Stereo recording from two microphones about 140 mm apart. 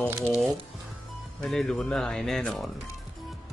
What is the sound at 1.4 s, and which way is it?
Speech, centre (ahead or behind).